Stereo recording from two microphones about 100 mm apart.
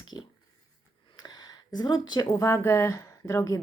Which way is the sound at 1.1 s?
40° left (ahead or behind).